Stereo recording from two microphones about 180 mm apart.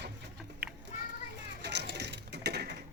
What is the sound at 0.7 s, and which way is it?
Children playing, centre (ahead or behind).